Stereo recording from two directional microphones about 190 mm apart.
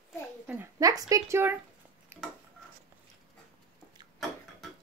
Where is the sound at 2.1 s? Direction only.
10° right (ahead or behind).